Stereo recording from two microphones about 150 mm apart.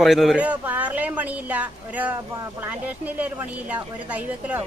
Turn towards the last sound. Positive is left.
turn(degrees=-10)  # may be behind; listen again after turning